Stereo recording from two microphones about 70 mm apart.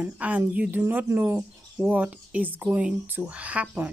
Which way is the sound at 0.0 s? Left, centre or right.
Right.